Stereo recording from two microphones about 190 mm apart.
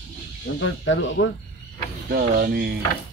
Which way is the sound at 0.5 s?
75° left (ahead or behind).